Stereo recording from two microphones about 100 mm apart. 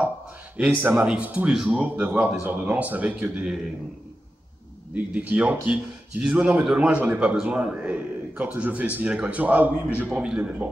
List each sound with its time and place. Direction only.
0.8 s a man's voice: 15° right (ahead or behind)
1.8 s a man's voice: 15° right (ahead or behind)
4.9 s a man's voice: 15° right (ahead or behind)